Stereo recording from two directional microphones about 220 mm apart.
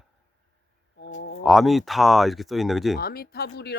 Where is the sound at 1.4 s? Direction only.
Centre (ahead or behind).